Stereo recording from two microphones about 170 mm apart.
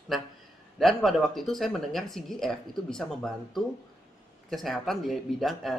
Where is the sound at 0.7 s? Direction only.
Centre (ahead or behind).